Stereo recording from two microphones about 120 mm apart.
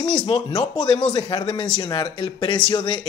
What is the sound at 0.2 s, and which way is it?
Speech, 35° left (ahead or behind).